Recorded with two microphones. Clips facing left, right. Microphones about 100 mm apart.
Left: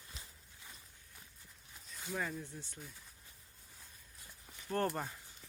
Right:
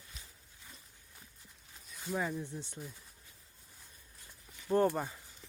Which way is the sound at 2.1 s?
15° right (ahead or behind).